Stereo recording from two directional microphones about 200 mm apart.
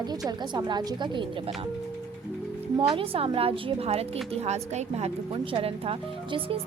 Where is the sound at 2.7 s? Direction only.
25° right (ahead or behind).